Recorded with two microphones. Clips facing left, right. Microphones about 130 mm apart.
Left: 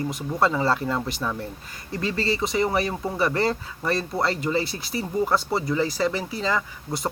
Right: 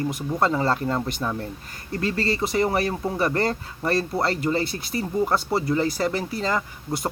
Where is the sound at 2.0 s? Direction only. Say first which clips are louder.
Right 1 dB; 55° right (ahead or behind).